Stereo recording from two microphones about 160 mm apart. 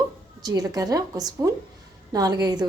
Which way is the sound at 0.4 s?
25° right (ahead or behind).